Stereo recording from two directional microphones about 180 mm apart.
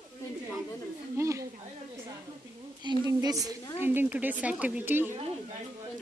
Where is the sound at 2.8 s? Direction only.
25° right (ahead or behind).